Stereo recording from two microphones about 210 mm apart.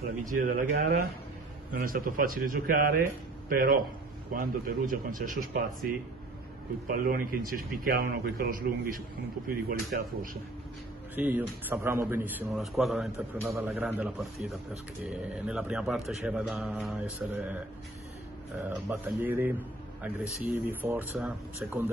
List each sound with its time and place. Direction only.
0.2 s a man's voice: 40° right (ahead or behind)
6.9 s a man's voice: 45° right (ahead or behind)
11.1 s a man's voice: 10° right (ahead or behind)
18.7 s speech: 10° right (ahead or behind)
20.5 s speech: 10° right (ahead or behind)